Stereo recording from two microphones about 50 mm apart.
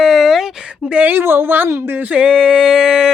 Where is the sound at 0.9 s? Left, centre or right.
Right.